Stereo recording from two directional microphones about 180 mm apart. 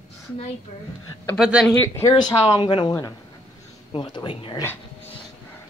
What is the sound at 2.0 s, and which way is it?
Speech, 20° left (ahead or behind).